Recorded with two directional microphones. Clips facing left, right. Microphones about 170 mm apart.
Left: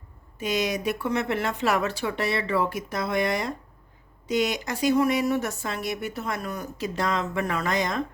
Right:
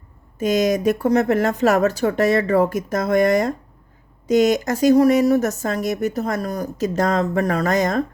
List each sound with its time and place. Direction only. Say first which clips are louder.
0.3 s speech: right 8 dB; 45° right (ahead or behind)